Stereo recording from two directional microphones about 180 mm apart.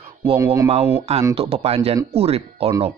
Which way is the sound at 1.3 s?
30° right (ahead or behind).